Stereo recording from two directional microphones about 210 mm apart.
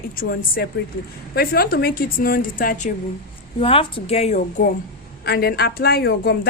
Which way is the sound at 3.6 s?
25° left (ahead or behind).